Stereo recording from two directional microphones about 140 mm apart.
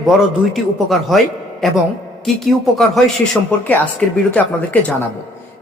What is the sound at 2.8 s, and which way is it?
Speech, 5° left (ahead or behind).